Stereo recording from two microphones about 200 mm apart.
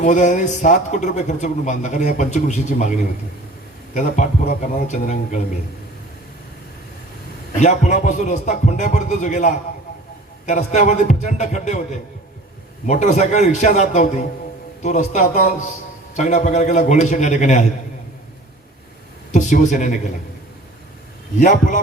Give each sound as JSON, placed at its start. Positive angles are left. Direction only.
{"t": 0.0, "sound": "a man's voice", "side_deg": 40}
{"t": 7.6, "sound": "a man's voice", "side_deg": 35}
{"t": 19.3, "sound": "a man's voice", "side_deg": 35}
{"t": 21.3, "sound": "a man's voice", "side_deg": 40}